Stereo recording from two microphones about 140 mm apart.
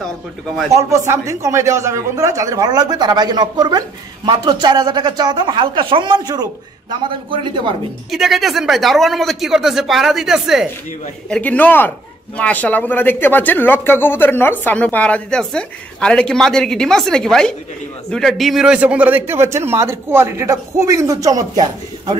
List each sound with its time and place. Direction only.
0.7 s speech: 20° right (ahead or behind)
8.1 s speech: centre (ahead or behind)
11.2 s speech: 10° left (ahead or behind); by 22.1 s 25° right (ahead or behind)